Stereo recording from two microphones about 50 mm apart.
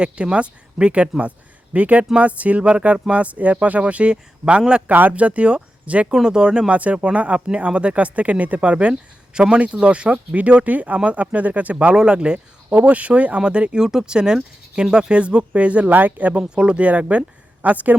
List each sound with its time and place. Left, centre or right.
0.0 s speech: right
4.9 s speech: right
6.1 s speech: centre
6.7 s speech: right
11.9 s speech: centre
12.7 s speech: right
15.9 s speech: right
16.3 s speech: centre